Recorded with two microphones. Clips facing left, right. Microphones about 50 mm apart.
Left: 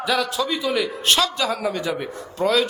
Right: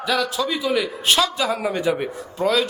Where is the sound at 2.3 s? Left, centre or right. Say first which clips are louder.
Even; centre.